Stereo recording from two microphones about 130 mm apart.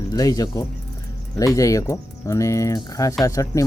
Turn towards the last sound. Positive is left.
turn(degrees=25)  # may be behind; listen again after turning